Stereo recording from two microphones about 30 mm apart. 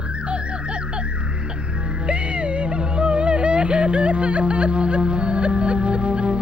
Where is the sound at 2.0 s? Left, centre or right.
Right.